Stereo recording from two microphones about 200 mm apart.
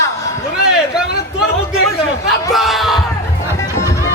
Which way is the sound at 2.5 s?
Centre (ahead or behind).